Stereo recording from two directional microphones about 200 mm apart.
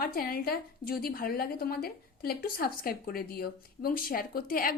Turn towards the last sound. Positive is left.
turn(degrees=45)  # may be behind; listen again after turning